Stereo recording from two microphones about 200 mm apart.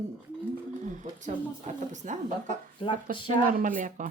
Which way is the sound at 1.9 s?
40° right (ahead or behind).